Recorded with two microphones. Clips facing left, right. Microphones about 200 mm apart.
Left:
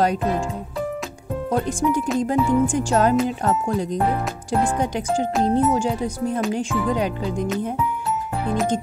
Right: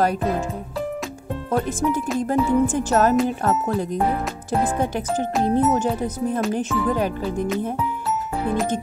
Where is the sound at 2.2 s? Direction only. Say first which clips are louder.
Right 1 dB; 15° left (ahead or behind).